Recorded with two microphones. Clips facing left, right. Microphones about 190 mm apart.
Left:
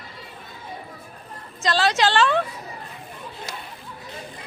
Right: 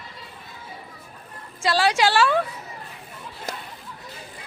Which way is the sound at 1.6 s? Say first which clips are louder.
Even; 10° right (ahead or behind).